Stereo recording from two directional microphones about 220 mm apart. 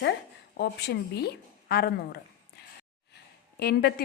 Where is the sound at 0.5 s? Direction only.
50° left (ahead or behind).